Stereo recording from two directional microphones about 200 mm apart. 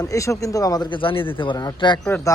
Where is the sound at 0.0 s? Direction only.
15° left (ahead or behind).